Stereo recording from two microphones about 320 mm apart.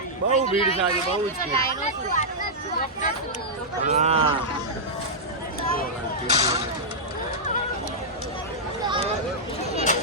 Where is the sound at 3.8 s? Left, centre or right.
Right.